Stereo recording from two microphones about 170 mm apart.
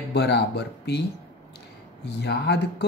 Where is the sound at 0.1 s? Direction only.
80° left.